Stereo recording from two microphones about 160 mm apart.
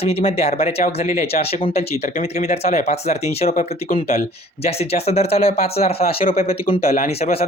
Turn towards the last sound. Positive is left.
turn(degrees=40)  # may be behind; listen again after turning